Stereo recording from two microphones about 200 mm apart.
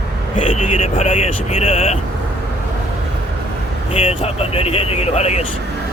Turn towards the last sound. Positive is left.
turn(degrees=35)  # may be behind; listen again after turning